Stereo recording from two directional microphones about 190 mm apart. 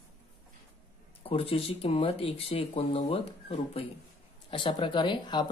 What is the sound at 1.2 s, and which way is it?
Speech, 30° left (ahead or behind).